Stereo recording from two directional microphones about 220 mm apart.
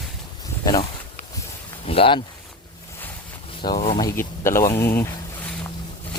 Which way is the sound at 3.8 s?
30° left (ahead or behind).